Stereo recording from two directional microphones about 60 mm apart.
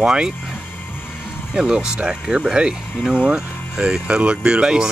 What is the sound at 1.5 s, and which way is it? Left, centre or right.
Speech, centre.